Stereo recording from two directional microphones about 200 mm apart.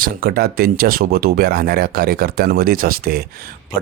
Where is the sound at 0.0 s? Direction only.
50° right (ahead or behind).